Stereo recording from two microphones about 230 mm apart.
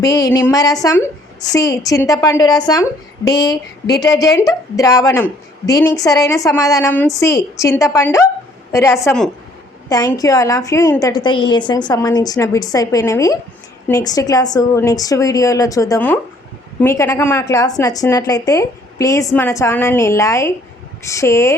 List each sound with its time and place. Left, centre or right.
0.0 s a woman's voice: centre